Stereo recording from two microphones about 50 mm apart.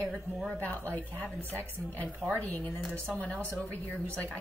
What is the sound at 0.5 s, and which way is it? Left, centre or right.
A woman's voice, left.